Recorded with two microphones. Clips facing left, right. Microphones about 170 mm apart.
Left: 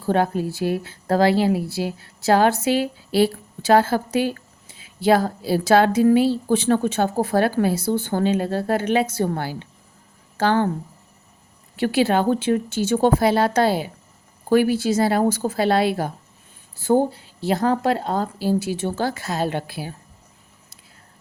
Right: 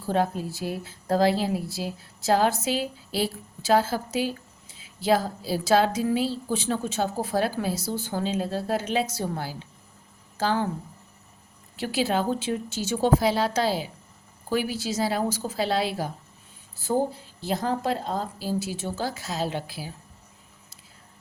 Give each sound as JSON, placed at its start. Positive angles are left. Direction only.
{"t": 0.0, "sound": "a woman's voice", "side_deg": 70}
{"t": 11.8, "sound": "a woman's voice", "side_deg": 60}
{"t": 16.8, "sound": "speech", "side_deg": 70}